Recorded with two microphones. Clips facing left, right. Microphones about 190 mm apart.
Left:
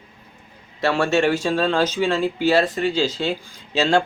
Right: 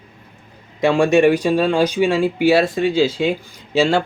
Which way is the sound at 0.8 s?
15° right (ahead or behind).